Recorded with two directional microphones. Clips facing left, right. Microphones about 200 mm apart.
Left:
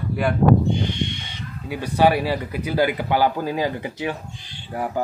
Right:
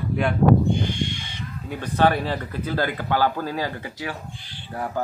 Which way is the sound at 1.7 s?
10° left (ahead or behind).